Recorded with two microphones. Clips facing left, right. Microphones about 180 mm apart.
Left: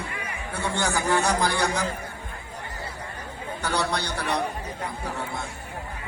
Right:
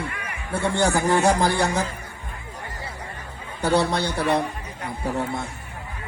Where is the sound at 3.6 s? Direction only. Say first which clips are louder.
Right 7 dB; 30° right (ahead or behind).